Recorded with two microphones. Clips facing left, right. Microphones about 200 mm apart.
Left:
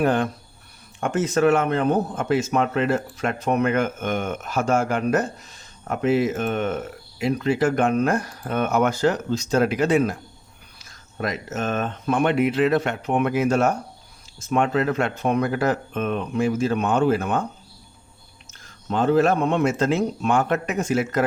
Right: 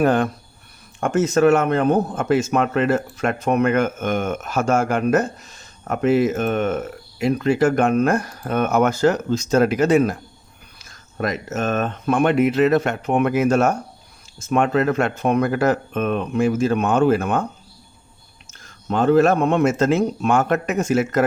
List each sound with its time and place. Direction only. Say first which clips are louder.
0.0 s speech: right 3 dB; 45° right (ahead or behind)
11.2 s speech: right 3 dB; 50° right (ahead or behind)
11.6 s speech: right 3 dB; 65° right (ahead or behind)
18.4 s speech: right 3 dB; 50° right (ahead or behind)